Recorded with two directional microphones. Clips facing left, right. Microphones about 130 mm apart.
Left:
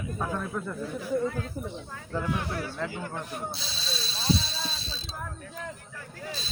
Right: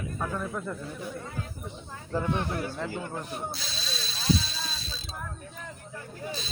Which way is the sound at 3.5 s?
30° left (ahead or behind).